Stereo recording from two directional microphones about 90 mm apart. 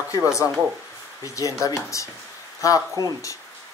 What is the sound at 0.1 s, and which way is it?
Speech, 40° left (ahead or behind).